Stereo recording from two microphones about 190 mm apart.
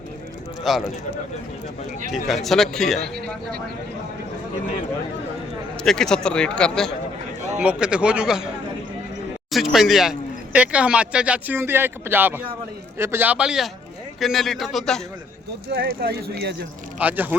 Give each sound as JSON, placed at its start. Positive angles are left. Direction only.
{"t": 0.7, "sound": "a man's voice", "side_deg": 0}
{"t": 2.1, "sound": "a man's voice", "side_deg": 0}
{"t": 5.8, "sound": "a man's voice", "side_deg": 5}
{"t": 9.7, "sound": "a man's voice", "side_deg": 0}
{"t": 15.7, "sound": "speech", "side_deg": -55}
{"t": 17.0, "sound": "speech", "side_deg": -10}